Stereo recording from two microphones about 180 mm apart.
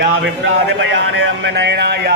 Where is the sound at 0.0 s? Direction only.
80° right.